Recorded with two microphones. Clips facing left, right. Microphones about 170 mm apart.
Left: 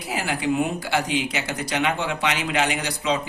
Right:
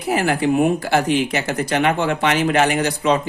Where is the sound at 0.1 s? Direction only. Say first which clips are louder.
Right 7 dB; 50° right (ahead or behind).